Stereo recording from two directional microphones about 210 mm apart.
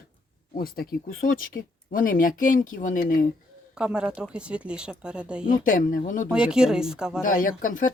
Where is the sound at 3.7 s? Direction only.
5° right (ahead or behind).